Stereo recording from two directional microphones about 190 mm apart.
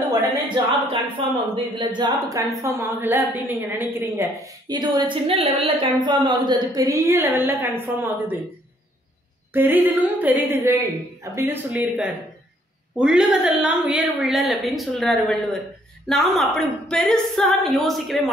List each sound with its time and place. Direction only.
1.3 s a woman's voice: 25° right (ahead or behind)
9.5 s a woman's voice: 10° right (ahead or behind)